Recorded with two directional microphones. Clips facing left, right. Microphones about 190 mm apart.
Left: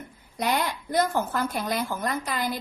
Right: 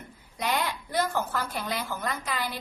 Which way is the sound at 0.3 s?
45° left (ahead or behind).